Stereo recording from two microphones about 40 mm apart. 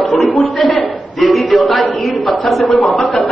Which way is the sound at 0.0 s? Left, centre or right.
Left.